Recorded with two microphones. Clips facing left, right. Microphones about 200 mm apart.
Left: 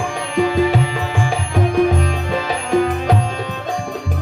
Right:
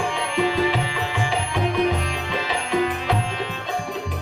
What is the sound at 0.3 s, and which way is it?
Music, 45° left (ahead or behind).